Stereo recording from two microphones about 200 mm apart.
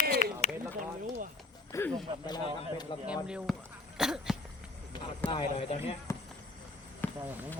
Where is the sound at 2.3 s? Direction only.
20° left (ahead or behind).